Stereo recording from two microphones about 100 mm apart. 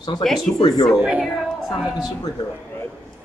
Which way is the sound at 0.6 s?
45° left (ahead or behind).